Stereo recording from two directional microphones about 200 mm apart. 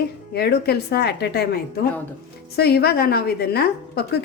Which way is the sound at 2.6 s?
50° left (ahead or behind).